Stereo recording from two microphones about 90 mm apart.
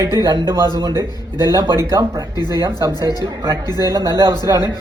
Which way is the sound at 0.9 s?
50° left (ahead or behind).